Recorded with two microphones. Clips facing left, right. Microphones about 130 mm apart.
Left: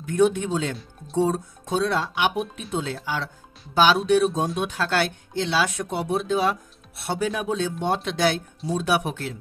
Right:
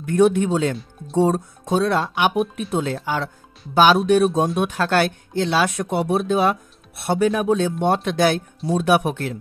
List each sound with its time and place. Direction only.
0.0 s speech: 60° right (ahead or behind)